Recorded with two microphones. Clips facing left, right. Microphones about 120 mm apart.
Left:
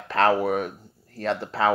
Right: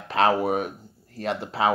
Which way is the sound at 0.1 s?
15° right (ahead or behind).